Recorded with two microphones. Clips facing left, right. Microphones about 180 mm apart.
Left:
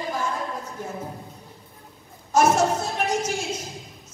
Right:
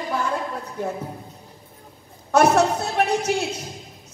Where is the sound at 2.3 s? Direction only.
65° right (ahead or behind).